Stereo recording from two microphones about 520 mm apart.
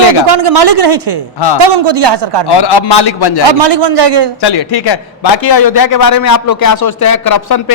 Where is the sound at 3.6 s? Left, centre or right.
Right.